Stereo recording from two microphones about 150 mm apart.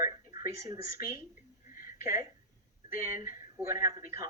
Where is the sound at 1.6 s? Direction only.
65° left (ahead or behind).